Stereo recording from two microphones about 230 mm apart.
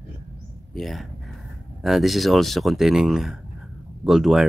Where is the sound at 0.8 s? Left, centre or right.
Centre.